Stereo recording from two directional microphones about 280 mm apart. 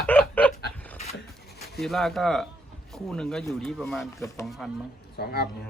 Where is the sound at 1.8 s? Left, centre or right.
Centre.